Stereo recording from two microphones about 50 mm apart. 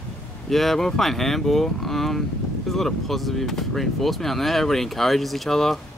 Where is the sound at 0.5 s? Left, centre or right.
Centre.